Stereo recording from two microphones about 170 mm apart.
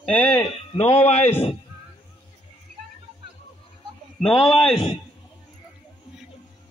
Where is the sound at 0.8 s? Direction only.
10° left (ahead or behind).